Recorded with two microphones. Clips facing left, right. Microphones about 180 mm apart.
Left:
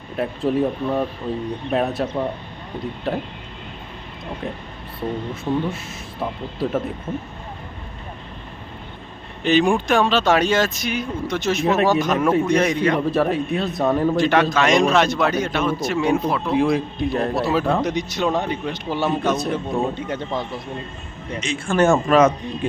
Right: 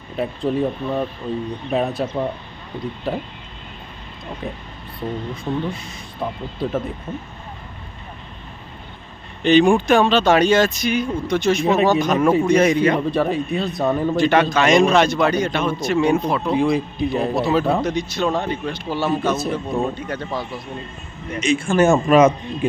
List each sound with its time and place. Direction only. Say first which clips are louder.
0.2 s speech: left 1 dB; centre (ahead or behind)
3.1 s speech: left 1 dB; centre (ahead or behind)
4.9 s speech: left 1 dB; 5° left (ahead or behind)
7.1 s speech: left 2 dB; 15° left (ahead or behind)
9.4 s speech: right 4 dB; 5° left (ahead or behind)
17.8 s speech: right 1 dB; 15° left (ahead or behind)
19.3 s speech: even; centre (ahead or behind)
20.1 s speech: left 1 dB; 20° left (ahead or behind)
21.4 s speech: right 2 dB; 10° right (ahead or behind)